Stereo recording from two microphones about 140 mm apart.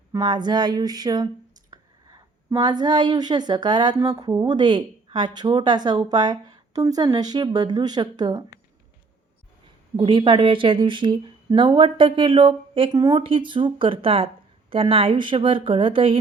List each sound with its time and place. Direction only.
0.1 s a sound: 30° right (ahead or behind)
2.6 s speech: 30° right (ahead or behind)
10.0 s speech: 35° right (ahead or behind)